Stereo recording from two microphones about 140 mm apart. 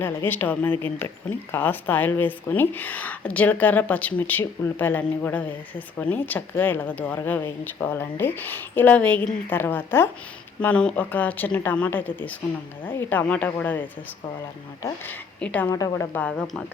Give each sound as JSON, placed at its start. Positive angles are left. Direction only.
{"t": 0.3, "sound": "speech", "side_deg": 15}
{"t": 14.8, "sound": "speech", "side_deg": 10}
{"t": 15.7, "sound": "speech", "side_deg": 20}